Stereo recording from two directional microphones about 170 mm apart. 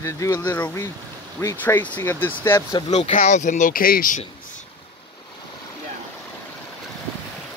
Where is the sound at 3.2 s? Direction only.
45° left (ahead or behind).